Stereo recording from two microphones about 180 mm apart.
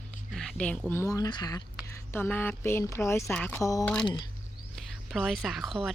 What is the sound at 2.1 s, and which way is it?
Speech, 10° left (ahead or behind).